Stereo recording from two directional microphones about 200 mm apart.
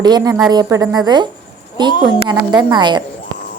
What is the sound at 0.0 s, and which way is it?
A woman's voice, 20° right (ahead or behind).